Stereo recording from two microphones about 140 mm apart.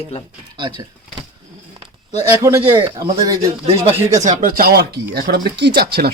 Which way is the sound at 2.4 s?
25° right (ahead or behind).